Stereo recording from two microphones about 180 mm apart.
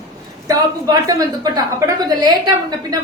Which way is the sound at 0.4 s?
20° right (ahead or behind).